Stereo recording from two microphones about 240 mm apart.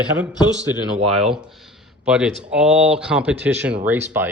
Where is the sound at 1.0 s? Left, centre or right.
Right.